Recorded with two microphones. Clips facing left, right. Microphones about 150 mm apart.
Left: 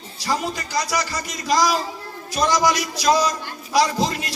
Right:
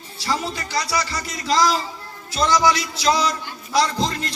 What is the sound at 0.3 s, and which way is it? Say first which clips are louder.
A man's voice: left 1 dB; 15° left (ahead or behind).